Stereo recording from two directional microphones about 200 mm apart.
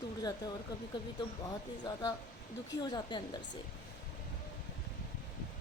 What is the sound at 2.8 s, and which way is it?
Speech, 20° left (ahead or behind).